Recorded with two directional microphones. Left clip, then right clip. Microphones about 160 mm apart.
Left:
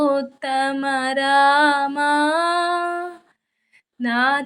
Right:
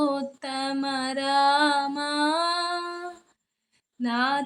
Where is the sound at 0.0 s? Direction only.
20° left (ahead or behind).